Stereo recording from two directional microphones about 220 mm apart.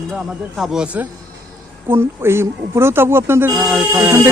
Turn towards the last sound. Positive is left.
turn(degrees=-10)  # may be behind; listen again after turning